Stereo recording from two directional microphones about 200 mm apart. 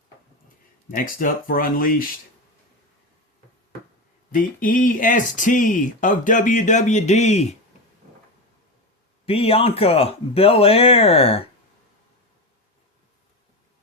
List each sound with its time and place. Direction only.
0.4 s speech: 45° left (ahead or behind)
4.3 s speech: 45° left (ahead or behind)
9.2 s speech: 30° left (ahead or behind)